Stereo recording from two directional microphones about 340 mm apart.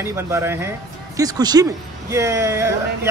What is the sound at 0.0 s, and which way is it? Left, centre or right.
Speech, centre.